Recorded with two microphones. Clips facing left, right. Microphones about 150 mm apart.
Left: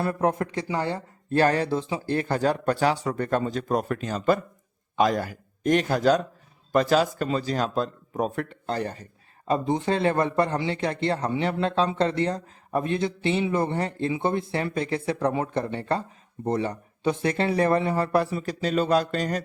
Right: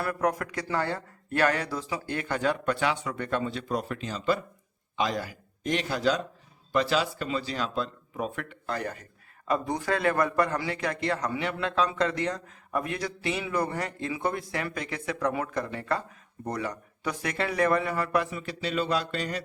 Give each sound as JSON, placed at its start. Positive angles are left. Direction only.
{"t": 0.0, "sound": "a man's voice", "side_deg": 25}
{"t": 1.3, "sound": "a man's voice", "side_deg": 30}